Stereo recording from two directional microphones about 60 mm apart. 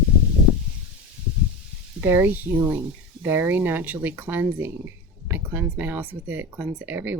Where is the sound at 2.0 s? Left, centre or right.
Right.